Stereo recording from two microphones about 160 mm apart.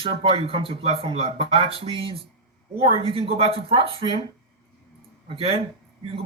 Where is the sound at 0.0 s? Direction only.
35° right (ahead or behind).